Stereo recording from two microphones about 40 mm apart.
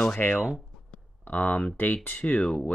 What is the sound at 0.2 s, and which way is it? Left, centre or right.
Speech, left.